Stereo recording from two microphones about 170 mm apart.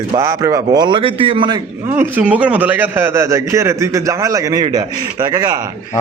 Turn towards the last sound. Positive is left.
turn(degrees=-20)  # may be behind; listen again after turning